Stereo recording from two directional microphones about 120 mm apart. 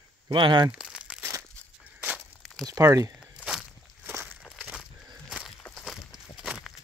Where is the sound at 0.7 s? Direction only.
5° right (ahead or behind).